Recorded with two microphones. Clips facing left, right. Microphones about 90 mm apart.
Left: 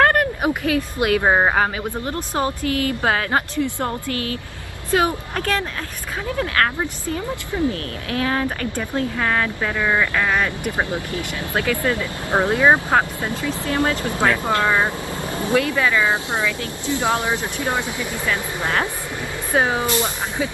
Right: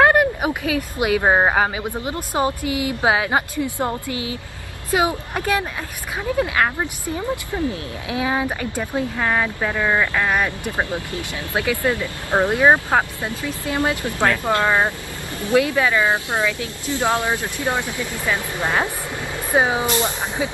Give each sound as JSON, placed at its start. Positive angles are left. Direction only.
{"t": 0.0, "sound": "a sound", "side_deg": -15}
{"t": 0.7, "sound": "a woman's voice", "side_deg": -15}
{"t": 7.7, "sound": "a woman's voice", "side_deg": -15}
{"t": 10.6, "sound": "speech", "side_deg": 20}
{"t": 11.5, "sound": "a woman's voice", "side_deg": -20}
{"t": 14.1, "sound": "speech", "side_deg": 20}
{"t": 14.5, "sound": "a woman's voice", "side_deg": -20}
{"t": 16.8, "sound": "speech", "side_deg": 20}
{"t": 18.2, "sound": "a woman's voice", "side_deg": -15}